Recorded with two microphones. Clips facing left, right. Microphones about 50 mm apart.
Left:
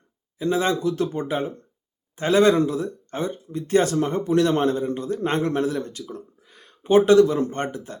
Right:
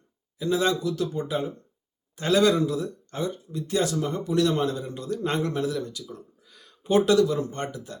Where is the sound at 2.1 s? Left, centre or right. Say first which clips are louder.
Left 4 dB; left.